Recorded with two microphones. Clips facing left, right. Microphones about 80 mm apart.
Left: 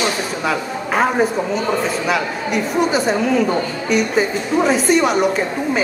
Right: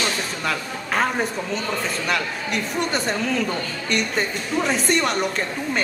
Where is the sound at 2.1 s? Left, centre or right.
Centre.